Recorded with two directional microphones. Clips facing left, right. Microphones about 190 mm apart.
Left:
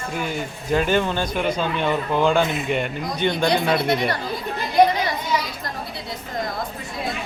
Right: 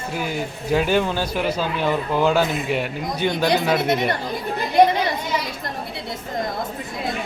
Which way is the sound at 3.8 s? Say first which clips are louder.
Right 1 dB; 20° right (ahead or behind).